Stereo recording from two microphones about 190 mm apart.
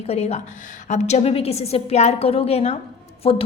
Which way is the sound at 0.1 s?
35° left (ahead or behind).